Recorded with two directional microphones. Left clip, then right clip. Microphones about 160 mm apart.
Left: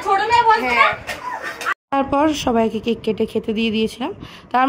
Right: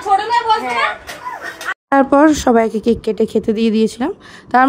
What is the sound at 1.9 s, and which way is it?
Speech, 45° right (ahead or behind).